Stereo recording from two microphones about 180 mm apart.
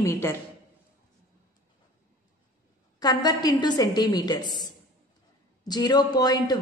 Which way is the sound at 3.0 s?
20° left (ahead or behind).